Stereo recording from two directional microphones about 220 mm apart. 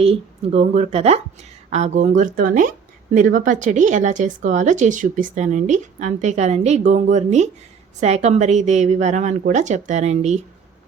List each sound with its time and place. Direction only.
0.0 s a woman's voice: 30° right (ahead or behind)